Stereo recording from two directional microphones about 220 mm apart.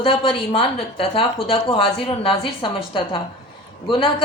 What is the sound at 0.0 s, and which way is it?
Speech, 25° left (ahead or behind).